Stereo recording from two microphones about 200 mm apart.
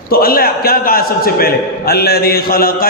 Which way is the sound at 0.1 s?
45° left (ahead or behind).